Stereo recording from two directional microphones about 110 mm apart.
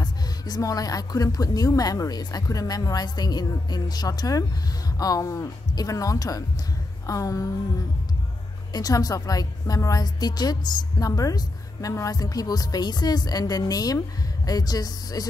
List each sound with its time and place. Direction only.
0.0 s a woman's voice: 35° left (ahead or behind)
8.7 s a woman's voice: 35° left (ahead or behind)